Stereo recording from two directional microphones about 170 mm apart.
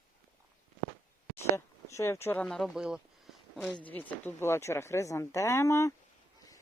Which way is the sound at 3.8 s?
10° left (ahead or behind).